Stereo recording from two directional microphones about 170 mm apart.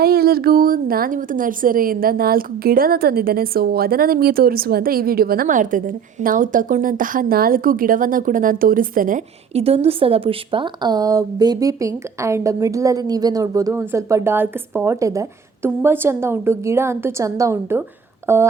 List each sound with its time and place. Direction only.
0.0 s a woman's voice: 65° right (ahead or behind)
9.6 s speech: 35° right (ahead or behind); by 18.4 s 15° right (ahead or behind)